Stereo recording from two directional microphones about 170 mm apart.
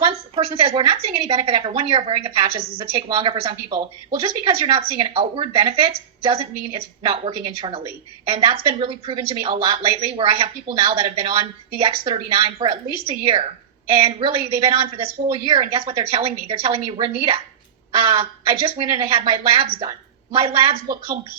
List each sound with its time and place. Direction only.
0.0 s speech: 35° right (ahead or behind)